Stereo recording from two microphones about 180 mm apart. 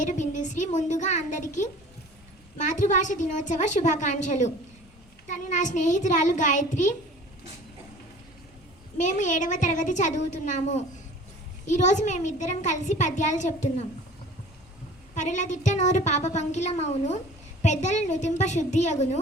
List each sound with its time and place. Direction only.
0.0 s a woman's voice: 45° left (ahead or behind)
9.0 s a woman's voice: 45° left (ahead or behind)
15.1 s a child's voice: 40° left (ahead or behind)